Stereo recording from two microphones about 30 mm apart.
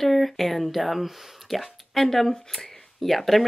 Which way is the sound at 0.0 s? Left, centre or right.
Centre.